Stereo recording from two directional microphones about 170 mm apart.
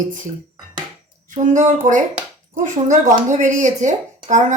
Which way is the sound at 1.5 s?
50° right (ahead or behind).